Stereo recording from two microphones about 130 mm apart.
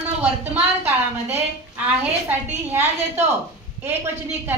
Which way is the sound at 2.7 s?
15° right (ahead or behind).